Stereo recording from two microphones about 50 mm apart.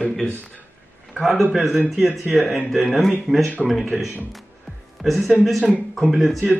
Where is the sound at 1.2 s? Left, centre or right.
Centre.